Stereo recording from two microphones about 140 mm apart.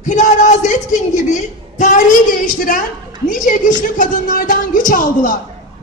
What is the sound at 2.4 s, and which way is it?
A woman's voice, 80° left.